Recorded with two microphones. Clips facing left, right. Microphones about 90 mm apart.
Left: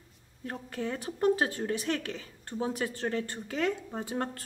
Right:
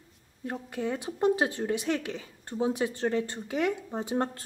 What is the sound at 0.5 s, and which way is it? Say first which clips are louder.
A woman's voice: right 3 dB; 15° right (ahead or behind).